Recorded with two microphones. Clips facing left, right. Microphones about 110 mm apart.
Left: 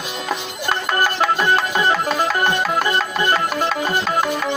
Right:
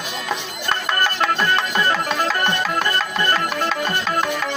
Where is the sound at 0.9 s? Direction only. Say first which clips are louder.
Left 3 dB; 10° left (ahead or behind).